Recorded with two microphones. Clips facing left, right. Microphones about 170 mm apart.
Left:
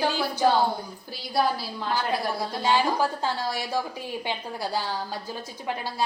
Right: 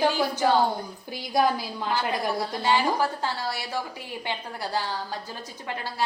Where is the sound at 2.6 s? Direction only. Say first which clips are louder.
Left 1 dB; 15° left (ahead or behind).